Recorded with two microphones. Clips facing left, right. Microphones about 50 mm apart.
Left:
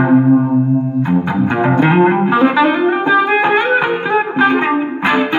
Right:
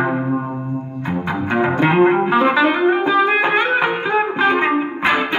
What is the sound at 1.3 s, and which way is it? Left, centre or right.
Music, centre.